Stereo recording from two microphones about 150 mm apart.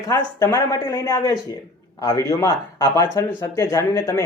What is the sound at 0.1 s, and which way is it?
Speech, 20° left (ahead or behind).